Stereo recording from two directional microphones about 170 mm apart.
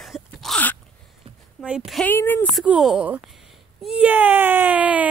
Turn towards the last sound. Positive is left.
turn(degrees=-10)  # may be behind; listen again after turning